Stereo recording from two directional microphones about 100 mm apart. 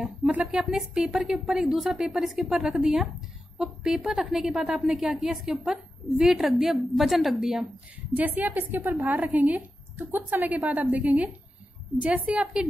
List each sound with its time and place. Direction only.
0.0 s a woman's voice: 5° right (ahead or behind)
8.2 s a woman's voice: 20° right (ahead or behind)
12.3 s a woman's voice: 5° right (ahead or behind)